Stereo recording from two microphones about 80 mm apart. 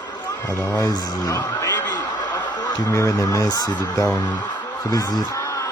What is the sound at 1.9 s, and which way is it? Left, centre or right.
Snicker, left.